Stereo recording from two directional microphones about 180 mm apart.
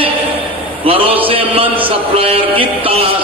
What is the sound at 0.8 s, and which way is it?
Music, 30° right (ahead or behind).